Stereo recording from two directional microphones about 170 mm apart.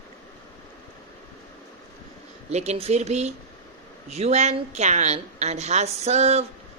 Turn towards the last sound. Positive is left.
turn(degrees=-40)  # may be behind; listen again after turning